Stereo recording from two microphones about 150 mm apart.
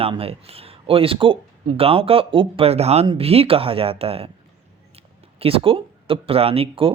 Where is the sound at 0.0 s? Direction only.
40° right (ahead or behind).